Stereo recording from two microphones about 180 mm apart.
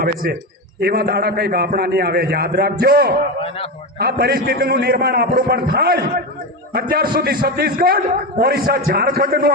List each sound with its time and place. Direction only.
0.0 s a man's voice: 55° right (ahead or behind)